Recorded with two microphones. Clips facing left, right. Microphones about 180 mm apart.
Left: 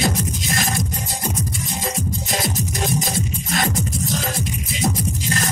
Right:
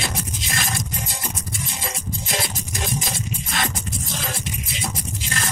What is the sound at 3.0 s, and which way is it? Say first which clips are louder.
Music: left 5 dB; 45° left (ahead or behind).